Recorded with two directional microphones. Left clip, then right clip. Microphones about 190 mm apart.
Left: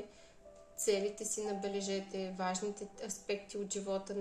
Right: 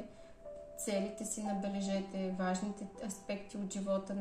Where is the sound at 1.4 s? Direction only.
35° left (ahead or behind).